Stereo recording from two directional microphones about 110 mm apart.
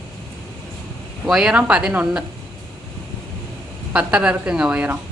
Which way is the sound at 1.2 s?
5° right (ahead or behind).